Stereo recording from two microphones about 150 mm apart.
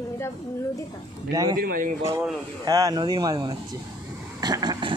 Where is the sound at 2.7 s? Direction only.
25° right (ahead or behind).